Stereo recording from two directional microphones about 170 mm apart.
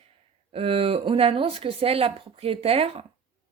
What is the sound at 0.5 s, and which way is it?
Speech, 35° right (ahead or behind).